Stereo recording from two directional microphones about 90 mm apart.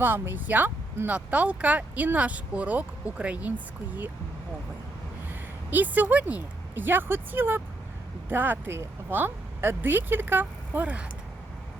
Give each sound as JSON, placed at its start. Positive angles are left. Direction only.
{"t": 0.0, "sound": "speech", "side_deg": -25}
{"t": 5.3, "sound": "speech", "side_deg": -20}